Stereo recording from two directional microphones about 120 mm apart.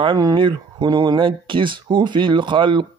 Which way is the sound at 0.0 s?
35° right (ahead or behind).